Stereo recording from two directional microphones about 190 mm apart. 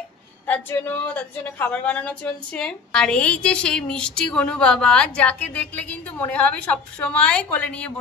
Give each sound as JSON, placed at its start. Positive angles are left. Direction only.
{"t": 0.5, "sound": "a woman's voice", "side_deg": 10}